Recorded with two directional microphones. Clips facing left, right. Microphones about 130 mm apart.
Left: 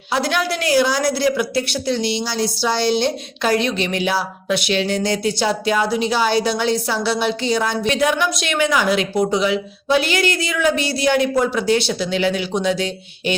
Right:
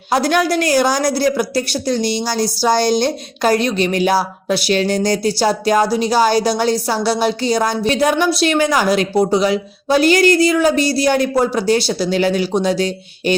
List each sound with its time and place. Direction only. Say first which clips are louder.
0.1 s a woman's voice: right 5 dB; 45° right (ahead or behind)